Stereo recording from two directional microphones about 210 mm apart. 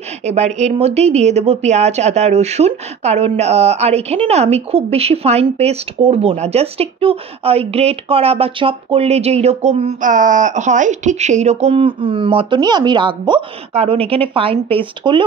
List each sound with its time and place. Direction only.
0.2 s a woman's voice: 30° right (ahead or behind)